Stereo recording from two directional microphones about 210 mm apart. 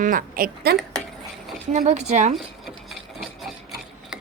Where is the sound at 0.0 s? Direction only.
40° right (ahead or behind).